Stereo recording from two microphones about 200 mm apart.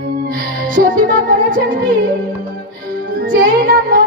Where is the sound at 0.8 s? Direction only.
40° right (ahead or behind).